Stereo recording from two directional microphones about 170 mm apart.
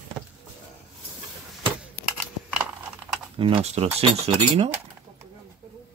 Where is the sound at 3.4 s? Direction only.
35° right (ahead or behind).